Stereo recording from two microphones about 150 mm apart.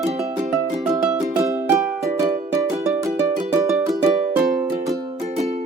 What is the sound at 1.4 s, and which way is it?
Music, 15° right (ahead or behind).